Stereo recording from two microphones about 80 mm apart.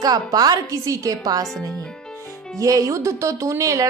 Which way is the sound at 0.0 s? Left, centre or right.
Right.